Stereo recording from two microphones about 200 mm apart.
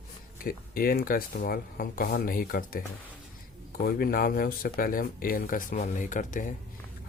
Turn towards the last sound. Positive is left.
turn(degrees=40)  # may be behind; listen again after turning